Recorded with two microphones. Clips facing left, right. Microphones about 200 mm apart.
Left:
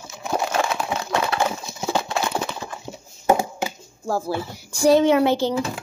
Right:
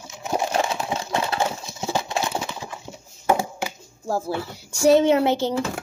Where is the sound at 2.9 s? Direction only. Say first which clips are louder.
Left 3 dB; 30° left (ahead or behind).